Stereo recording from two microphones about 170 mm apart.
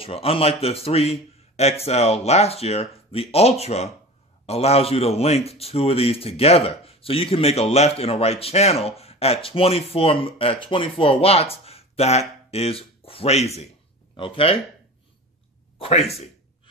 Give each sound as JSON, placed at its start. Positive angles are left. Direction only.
{"t": 0.0, "sound": "speech", "side_deg": 35}
{"t": 15.8, "sound": "speech", "side_deg": 40}